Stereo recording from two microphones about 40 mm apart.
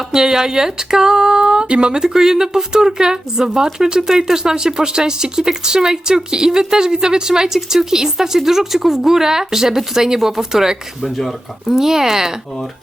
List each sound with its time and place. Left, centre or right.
0.1 s a sound: centre
2.0 s speech: centre
11.0 s speech: centre
11.7 s speech: centre